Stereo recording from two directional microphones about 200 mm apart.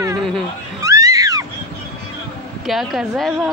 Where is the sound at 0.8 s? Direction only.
15° right (ahead or behind).